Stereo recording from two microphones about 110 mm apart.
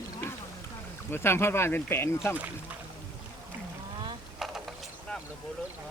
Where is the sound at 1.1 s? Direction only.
20° left (ahead or behind).